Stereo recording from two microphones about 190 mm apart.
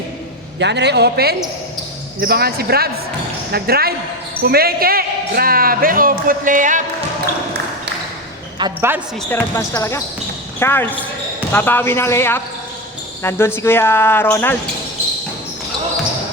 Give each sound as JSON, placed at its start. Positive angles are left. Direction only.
{"t": 0.6, "sound": "a man's voice", "side_deg": -65}
{"t": 8.9, "sound": "speech", "side_deg": -10}
{"t": 9.3, "sound": "speech", "side_deg": 15}